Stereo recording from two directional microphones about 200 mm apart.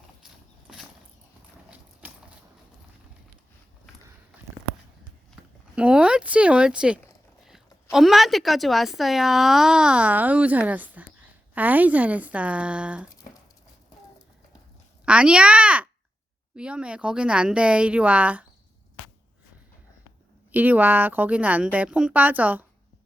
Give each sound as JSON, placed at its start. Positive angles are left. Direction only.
{"t": 2.0, "sound": "a sound", "side_deg": -10}
{"t": 5.7, "sound": "a woman's voice", "side_deg": -5}
{"t": 15.0, "sound": "speech", "side_deg": -5}
{"t": 20.5, "sound": "a woman's voice", "side_deg": -10}